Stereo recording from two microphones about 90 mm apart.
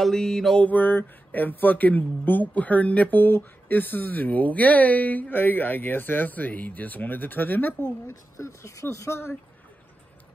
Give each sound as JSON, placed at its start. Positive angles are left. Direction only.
{"t": 0.0, "sound": "mantra", "side_deg": 5}
{"t": 0.7, "sound": "speech", "side_deg": 20}
{"t": 8.1, "sound": "speech", "side_deg": 35}